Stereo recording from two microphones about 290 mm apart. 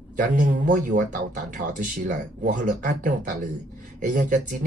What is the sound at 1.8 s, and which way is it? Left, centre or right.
Speech, right.